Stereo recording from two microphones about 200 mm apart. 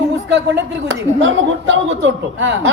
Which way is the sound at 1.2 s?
70° right (ahead or behind).